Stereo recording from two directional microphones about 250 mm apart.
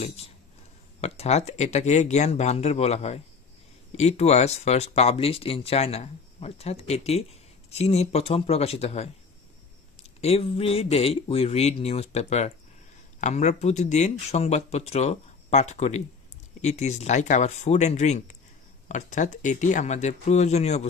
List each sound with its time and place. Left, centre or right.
0.0 s speech: left
10.2 s speech: left